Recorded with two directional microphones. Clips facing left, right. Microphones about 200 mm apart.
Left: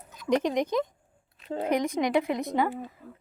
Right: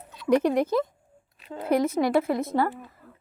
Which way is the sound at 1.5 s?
50° left (ahead or behind).